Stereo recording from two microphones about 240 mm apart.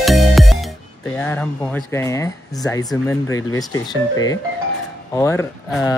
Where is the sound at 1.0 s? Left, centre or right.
Centre.